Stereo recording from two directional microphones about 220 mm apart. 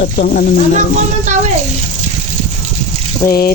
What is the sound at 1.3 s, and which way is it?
Speech, 35° right (ahead or behind).